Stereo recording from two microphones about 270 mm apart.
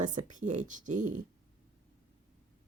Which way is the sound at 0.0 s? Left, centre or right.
Right.